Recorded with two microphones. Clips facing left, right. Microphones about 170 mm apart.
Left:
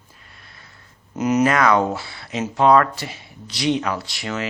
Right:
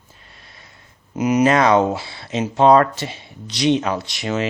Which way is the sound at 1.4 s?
25° right (ahead or behind).